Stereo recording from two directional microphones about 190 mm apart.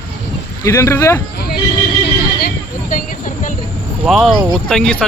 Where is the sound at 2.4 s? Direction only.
45° left (ahead or behind).